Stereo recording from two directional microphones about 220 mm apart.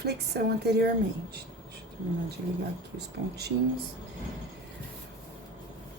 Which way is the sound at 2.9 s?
50° right (ahead or behind).